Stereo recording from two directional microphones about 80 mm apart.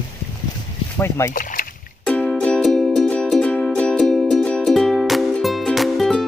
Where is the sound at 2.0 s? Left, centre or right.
Centre.